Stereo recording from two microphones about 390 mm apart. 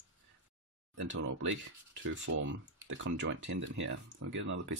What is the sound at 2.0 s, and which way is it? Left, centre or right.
Speech, right.